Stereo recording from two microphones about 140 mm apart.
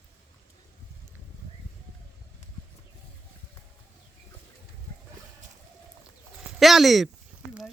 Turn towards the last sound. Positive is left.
turn(degrees=0)  # may be behind; listen again after turning